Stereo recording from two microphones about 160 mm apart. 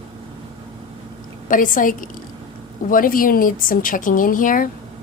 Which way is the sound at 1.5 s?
55° left (ahead or behind).